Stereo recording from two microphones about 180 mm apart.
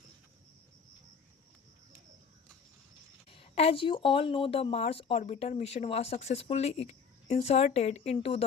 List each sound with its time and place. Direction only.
3.2 s speech: 30° left (ahead or behind)